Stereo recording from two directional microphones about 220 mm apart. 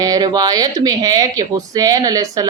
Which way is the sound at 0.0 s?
15° right (ahead or behind).